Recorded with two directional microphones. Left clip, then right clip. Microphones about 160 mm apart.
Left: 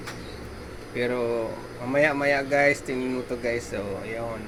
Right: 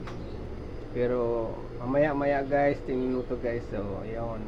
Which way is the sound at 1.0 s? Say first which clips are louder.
Left 1 dB; 30° left (ahead or behind).